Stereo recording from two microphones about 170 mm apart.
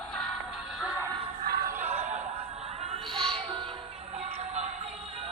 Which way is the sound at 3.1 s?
30° right (ahead or behind).